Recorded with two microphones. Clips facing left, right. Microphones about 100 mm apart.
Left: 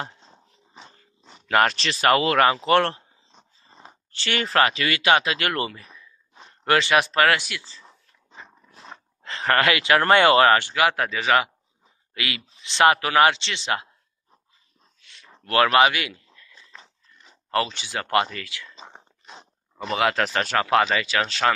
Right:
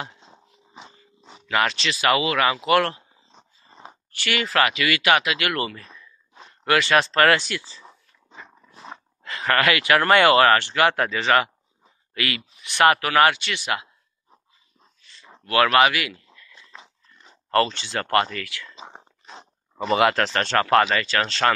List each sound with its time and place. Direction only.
0.2 s biting: 10° right (ahead or behind)
1.5 s speech: 45° left (ahead or behind)
3.3 s dog: centre (ahead or behind)
4.1 s speech: 30° left (ahead or behind)
6.9 s speech: 10° left (ahead or behind)
7.6 s a sound: 15° right (ahead or behind)
9.2 s speech: 30° left (ahead or behind)
10.7 s speech: 5° left (ahead or behind); by 13.7 s 25° left (ahead or behind)
15.0 s a sound: 75° left (ahead or behind)
15.5 s speech: 25° left (ahead or behind)
16.5 s dog: 10° right (ahead or behind)
17.3 s speech: 5° left (ahead or behind)
18.8 s whispering: 15° right (ahead or behind)
19.2 s speech: centre (ahead or behind)